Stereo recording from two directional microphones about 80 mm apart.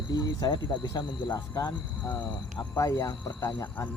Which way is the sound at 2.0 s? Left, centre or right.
Left.